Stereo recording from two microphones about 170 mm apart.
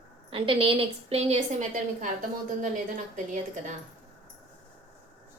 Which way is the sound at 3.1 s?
50° right (ahead or behind).